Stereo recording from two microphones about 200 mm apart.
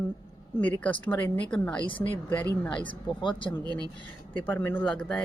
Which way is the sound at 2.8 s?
25° left (ahead or behind).